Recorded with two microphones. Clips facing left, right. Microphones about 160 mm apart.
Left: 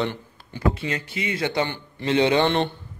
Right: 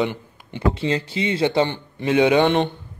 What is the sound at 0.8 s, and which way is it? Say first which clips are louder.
Speech: right 6 dB; 30° right (ahead or behind).